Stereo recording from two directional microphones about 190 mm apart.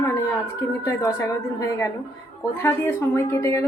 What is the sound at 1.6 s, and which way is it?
A woman's voice, 15° left (ahead or behind).